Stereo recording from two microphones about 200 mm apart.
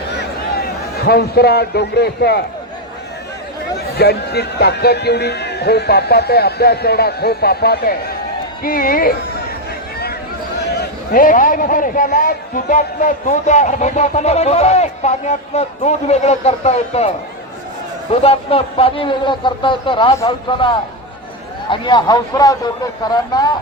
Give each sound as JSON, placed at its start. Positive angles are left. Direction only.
{"t": 0.2, "sound": "a sound", "side_deg": 50}
{"t": 3.8, "sound": "a man's voice", "side_deg": 55}
{"t": 10.6, "sound": "a man's voice", "side_deg": 50}
{"t": 18.1, "sound": "a man's voice", "side_deg": 30}